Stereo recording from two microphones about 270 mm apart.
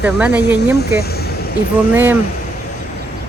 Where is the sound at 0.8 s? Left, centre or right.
Left.